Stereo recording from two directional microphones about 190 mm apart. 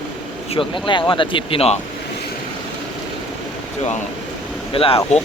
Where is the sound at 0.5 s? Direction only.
25° left (ahead or behind).